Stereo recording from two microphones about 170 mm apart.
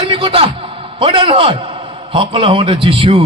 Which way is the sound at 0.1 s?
30° right (ahead or behind).